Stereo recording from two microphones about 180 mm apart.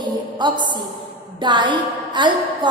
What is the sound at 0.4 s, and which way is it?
Music, 25° right (ahead or behind).